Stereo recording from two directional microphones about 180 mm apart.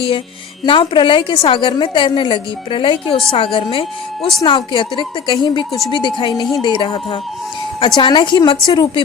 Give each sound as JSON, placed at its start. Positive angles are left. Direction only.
{"t": 0.6, "sound": "a woman's voice", "side_deg": 25}